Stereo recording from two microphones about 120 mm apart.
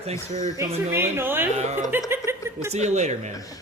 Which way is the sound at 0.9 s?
20° right (ahead or behind).